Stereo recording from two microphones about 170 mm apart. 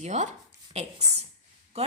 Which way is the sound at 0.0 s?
45° right (ahead or behind).